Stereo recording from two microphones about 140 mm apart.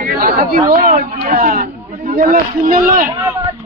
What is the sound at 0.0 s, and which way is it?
Chatter, 90° right.